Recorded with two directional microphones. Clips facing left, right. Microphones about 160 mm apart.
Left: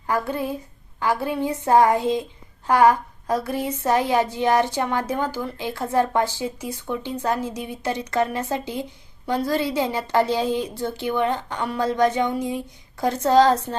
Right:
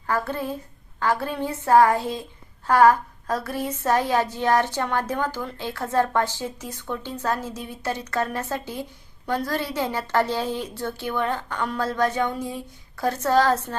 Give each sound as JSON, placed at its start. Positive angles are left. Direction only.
{"t": 0.1, "sound": "a woman's voice", "side_deg": 15}